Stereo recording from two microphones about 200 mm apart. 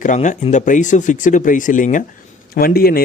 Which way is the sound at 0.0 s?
40° left (ahead or behind).